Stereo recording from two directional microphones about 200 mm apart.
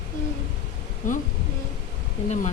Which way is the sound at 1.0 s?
40° left (ahead or behind).